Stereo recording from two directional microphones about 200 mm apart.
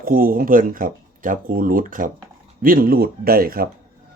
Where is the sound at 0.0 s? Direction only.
45° right (ahead or behind).